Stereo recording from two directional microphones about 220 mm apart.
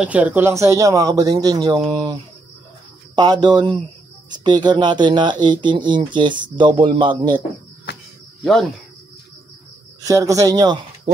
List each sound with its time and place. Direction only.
0.0 s speech: 5° right (ahead or behind)
3.2 s speech: 20° right (ahead or behind)
10.0 s speech: 15° right (ahead or behind)